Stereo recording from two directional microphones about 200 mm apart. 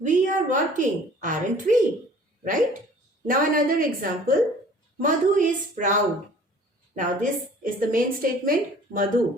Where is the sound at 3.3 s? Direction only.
45° right (ahead or behind).